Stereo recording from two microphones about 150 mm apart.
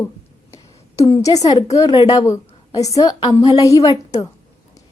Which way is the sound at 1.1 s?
25° left (ahead or behind).